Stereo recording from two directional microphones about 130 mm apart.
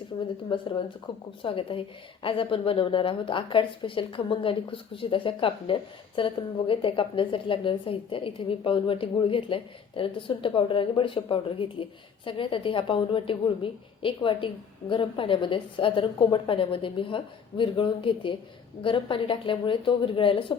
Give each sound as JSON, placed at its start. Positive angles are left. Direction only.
{"t": 0.1, "sound": "a woman's voice", "side_deg": 30}